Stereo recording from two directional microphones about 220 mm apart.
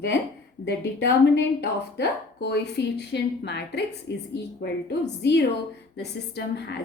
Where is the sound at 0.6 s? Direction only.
50° left (ahead or behind).